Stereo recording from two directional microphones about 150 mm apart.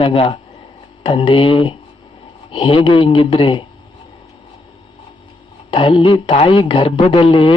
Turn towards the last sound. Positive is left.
turn(degrees=35)  # may be behind; listen again after turning